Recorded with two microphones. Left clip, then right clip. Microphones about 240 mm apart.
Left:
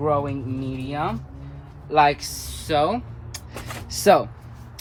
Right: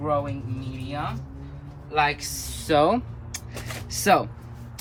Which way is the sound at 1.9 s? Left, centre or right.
Centre.